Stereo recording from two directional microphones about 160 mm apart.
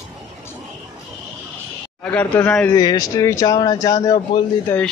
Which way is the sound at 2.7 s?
25° left (ahead or behind).